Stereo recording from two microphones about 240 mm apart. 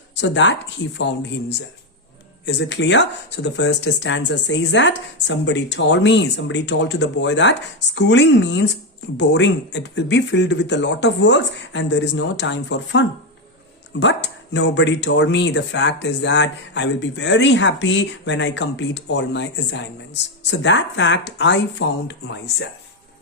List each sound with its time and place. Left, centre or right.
0.2 s speech: left